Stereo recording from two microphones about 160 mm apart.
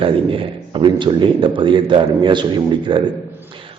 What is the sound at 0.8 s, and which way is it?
A man's voice, 30° right (ahead or behind).